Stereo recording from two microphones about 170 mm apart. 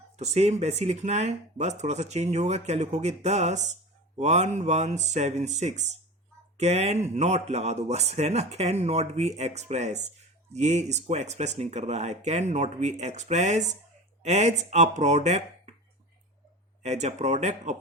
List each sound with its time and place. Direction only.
0.2 s speech: 40° right (ahead or behind)
16.8 s speech: 40° right (ahead or behind)